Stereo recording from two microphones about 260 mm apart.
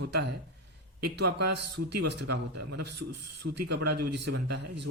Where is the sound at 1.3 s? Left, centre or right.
Right.